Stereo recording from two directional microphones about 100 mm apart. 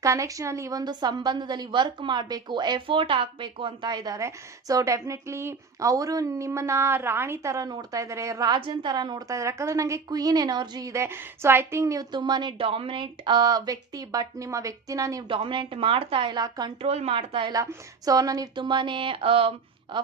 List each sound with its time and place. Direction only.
0.0 s a woman's voice: 30° right (ahead or behind); by 2.8 s 50° right (ahead or behind)
2.8 s a woman's voice: 60° right (ahead or behind); by 8.6 s 40° right (ahead or behind)
8.6 s a woman's voice: 50° right (ahead or behind); by 12.0 s 30° right (ahead or behind)
12.1 s a woman's voice: 45° right (ahead or behind)
15.3 s speech: 55° right (ahead or behind)
16.8 s speech: 90° right; by 17.5 s 65° right (ahead or behind)
17.5 s a woman's voice: 35° right (ahead or behind)
18.5 s speech: 50° right (ahead or behind)